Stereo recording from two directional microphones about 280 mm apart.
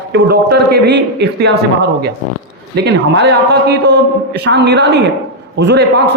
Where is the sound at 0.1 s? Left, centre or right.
Right.